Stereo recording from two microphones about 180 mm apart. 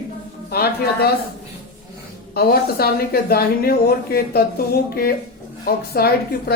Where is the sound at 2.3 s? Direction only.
60° left (ahead or behind).